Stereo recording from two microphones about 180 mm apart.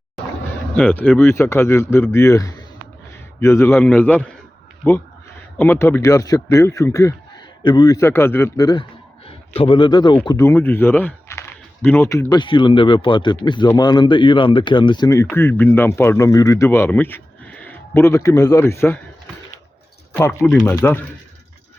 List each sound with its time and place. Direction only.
0.8 s a man's voice: 10° left (ahead or behind)
20.1 s speech: 10° left (ahead or behind)